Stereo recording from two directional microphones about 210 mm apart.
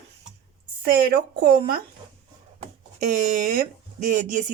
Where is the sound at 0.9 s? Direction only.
50° right (ahead or behind).